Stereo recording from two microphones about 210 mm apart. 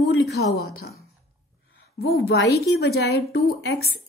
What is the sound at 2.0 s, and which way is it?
A woman's voice, 50° left (ahead or behind).